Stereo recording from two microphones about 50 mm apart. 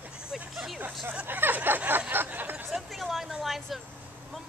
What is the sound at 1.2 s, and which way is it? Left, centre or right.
Speech, right.